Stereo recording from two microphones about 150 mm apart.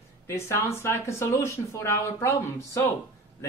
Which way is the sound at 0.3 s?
15° left (ahead or behind).